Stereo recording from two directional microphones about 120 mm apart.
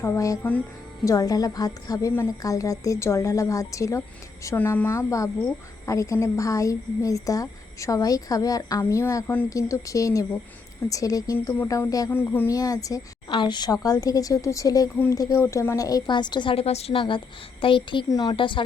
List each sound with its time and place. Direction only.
0.0 s a woman's voice: 25° left (ahead or behind)
12.1 s speech: 15° left (ahead or behind)
12.5 s a woman's voice: 30° left (ahead or behind)
13.3 s a woman's voice: 40° left (ahead or behind)
18.1 s a woman's voice: 35° left (ahead or behind)